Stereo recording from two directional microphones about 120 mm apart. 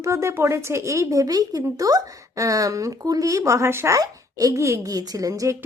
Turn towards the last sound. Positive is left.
turn(degrees=-30)  # may be behind; listen again after turning